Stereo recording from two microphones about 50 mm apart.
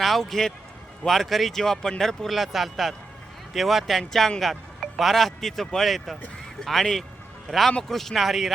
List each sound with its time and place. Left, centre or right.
0.0 s speech: centre